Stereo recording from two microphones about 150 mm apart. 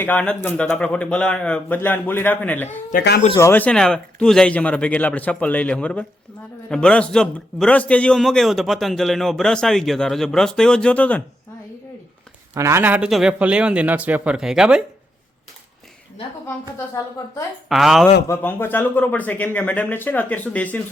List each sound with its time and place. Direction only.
0.0 s speech: 10° left (ahead or behind)
2.9 s speech: 65° left (ahead or behind)
3.3 s a man's voice: 15° left (ahead or behind)
12.5 s a man's voice: 20° right (ahead or behind)
17.7 s a man's voice: centre (ahead or behind)
18.3 s speech: 15° left (ahead or behind)